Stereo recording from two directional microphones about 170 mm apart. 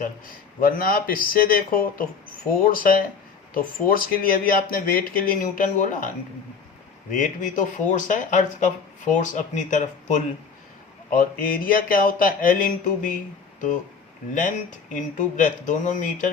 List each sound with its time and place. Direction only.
0.0 s speech: 55° left (ahead or behind)
7.1 s speech: 50° left (ahead or behind)
11.1 s speech: 60° left (ahead or behind)
14.3 s speech: 50° left (ahead or behind)